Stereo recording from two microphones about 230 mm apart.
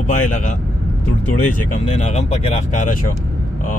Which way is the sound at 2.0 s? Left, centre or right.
Left.